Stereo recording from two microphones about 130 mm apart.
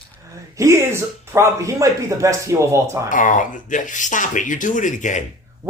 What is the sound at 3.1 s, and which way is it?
Speech, 80° left.